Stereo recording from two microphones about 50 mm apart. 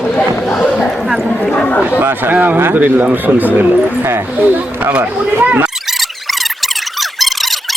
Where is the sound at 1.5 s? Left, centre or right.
Left.